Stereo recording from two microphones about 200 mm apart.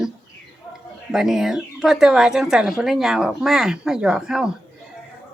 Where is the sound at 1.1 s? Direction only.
Centre (ahead or behind).